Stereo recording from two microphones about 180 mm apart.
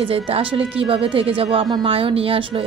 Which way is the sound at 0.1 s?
30° right (ahead or behind).